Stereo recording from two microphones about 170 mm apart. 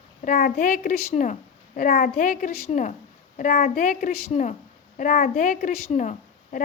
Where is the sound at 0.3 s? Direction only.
60° left (ahead or behind).